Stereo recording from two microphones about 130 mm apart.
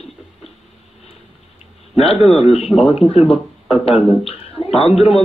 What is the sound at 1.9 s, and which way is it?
Speech, 50° left (ahead or behind).